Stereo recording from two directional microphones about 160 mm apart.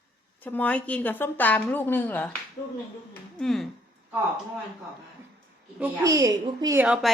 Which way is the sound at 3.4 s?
Centre (ahead or behind).